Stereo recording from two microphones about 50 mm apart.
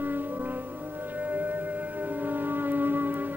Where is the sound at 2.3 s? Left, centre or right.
Right.